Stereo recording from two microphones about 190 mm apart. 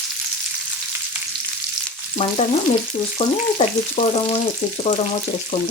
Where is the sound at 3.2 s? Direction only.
30° left (ahead or behind).